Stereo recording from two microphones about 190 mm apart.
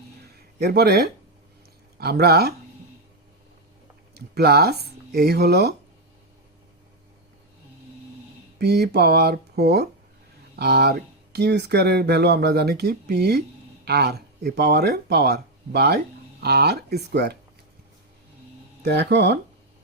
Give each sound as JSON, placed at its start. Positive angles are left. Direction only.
{"t": 0.6, "sound": "speech", "side_deg": -55}
{"t": 4.1, "sound": "speech", "side_deg": -55}
{"t": 8.5, "sound": "speech", "side_deg": -60}
{"t": 18.8, "sound": "speech", "side_deg": -60}